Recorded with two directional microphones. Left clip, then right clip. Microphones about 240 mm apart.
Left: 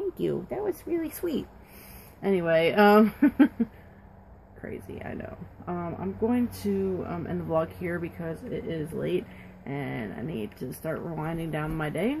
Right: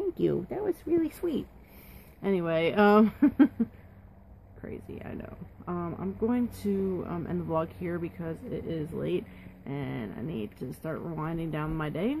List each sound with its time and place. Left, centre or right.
0.2 s speech: right
2.2 s speech: centre
4.6 s speech: centre